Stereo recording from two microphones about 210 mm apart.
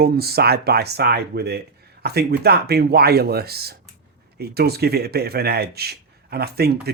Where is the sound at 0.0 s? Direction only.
50° right (ahead or behind).